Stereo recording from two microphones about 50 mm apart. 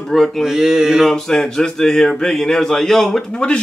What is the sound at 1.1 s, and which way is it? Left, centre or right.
Speech, centre.